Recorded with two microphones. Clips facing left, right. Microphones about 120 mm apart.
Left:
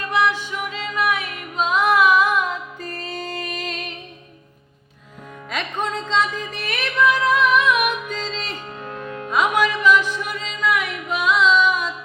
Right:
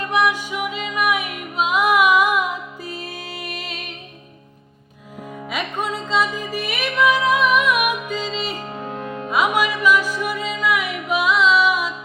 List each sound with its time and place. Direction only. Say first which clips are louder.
0.1 s music: even; 15° right (ahead or behind)
5.5 s music: even; 5° right (ahead or behind)
8.9 s music: right 1 dB; 20° right (ahead or behind)
9.3 s music: even; 5° right (ahead or behind)